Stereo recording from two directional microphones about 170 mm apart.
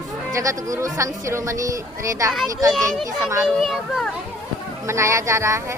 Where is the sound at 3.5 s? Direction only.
Centre (ahead or behind).